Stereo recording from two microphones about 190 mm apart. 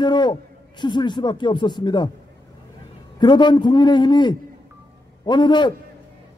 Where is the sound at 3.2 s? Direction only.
25° left (ahead or behind).